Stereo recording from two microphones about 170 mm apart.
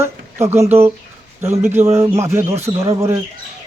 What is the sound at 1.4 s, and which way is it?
A man's voice, 15° right (ahead or behind).